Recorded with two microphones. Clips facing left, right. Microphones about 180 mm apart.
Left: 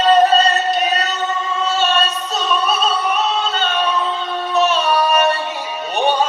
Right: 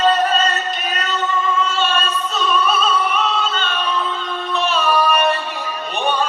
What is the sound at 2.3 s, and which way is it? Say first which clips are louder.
Opera: right 1 dB; 40° left (ahead or behind).